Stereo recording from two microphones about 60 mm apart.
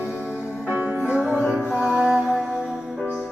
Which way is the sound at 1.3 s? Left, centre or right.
Centre.